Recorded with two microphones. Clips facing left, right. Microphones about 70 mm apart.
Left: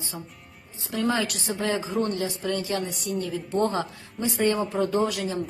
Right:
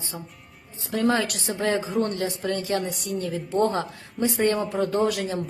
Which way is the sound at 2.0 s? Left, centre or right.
Right.